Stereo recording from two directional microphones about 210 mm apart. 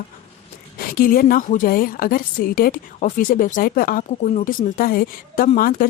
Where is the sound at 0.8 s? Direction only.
45° left (ahead or behind).